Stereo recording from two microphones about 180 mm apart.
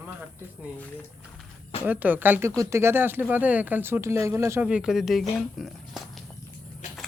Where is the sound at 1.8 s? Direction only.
10° right (ahead or behind).